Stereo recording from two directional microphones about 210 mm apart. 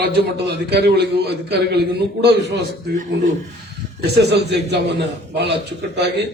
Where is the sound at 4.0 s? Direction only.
55° right (ahead or behind).